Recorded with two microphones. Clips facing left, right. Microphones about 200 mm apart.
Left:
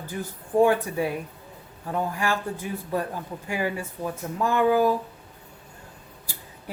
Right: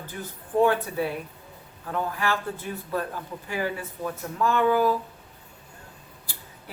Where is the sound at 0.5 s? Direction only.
10° left (ahead or behind).